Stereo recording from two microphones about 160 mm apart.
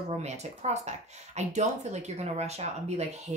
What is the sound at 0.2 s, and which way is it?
Speech, 45° right (ahead or behind).